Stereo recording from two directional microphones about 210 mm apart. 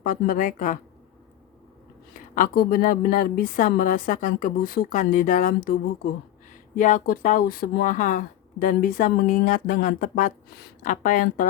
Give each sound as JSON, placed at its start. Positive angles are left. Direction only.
{"t": 0.0, "sound": "speech", "side_deg": 40}
{"t": 2.3, "sound": "speech", "side_deg": 40}